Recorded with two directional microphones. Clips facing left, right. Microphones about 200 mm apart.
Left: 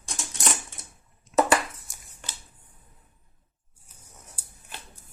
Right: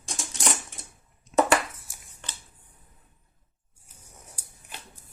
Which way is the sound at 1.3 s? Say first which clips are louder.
Even; centre (ahead or behind).